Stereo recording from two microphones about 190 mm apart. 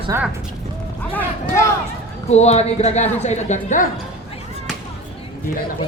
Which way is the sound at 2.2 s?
35° left (ahead or behind).